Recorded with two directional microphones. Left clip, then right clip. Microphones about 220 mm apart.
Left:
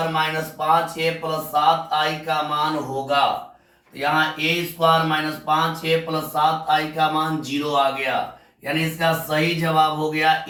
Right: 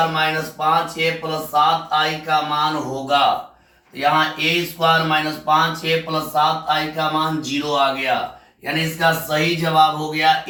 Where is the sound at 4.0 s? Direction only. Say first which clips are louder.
Right 3 dB; 15° right (ahead or behind).